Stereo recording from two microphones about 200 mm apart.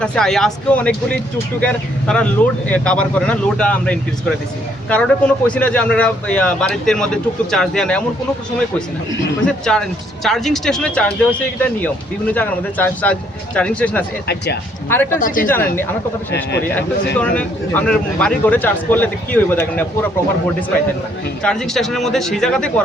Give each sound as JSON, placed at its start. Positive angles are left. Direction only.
{"t": 0.0, "sound": "a man's voice", "side_deg": 5}
{"t": 9.4, "sound": "a man's voice", "side_deg": 5}
{"t": 14.3, "sound": "speech", "side_deg": 55}
{"t": 14.8, "sound": "speech", "side_deg": 10}
{"t": 17.2, "sound": "speech", "side_deg": 10}
{"t": 21.4, "sound": "a man's voice", "side_deg": 5}